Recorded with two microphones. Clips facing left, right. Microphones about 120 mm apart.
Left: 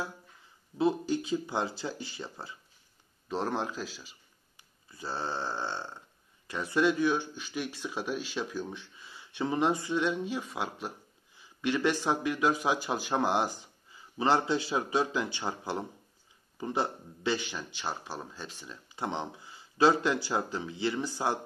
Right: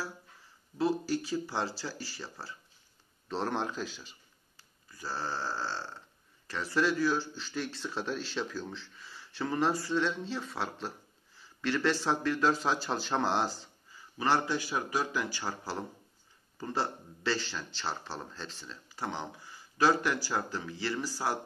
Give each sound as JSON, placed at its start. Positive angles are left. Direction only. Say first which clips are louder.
{"t": 0.7, "sound": "speech", "louder": "left 2 dB", "side_deg": 20}
{"t": 3.3, "sound": "a man's voice", "louder": "left 1 dB", "side_deg": 5}
{"t": 4.6, "sound": "burping", "louder": "left 3 dB", "side_deg": 25}
{"t": 16.5, "sound": "speech", "louder": "left 2 dB", "side_deg": 15}